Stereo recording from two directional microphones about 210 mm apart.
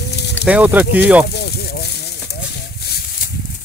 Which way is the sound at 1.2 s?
50° left (ahead or behind).